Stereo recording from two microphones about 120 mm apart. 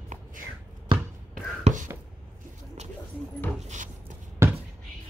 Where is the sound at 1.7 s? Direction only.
65° right (ahead or behind).